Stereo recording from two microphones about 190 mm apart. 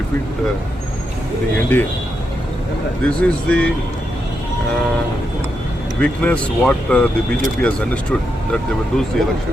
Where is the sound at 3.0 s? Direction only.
5° left (ahead or behind).